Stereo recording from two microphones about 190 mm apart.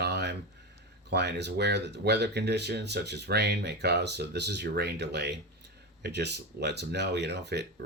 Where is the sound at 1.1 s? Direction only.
60° right (ahead or behind).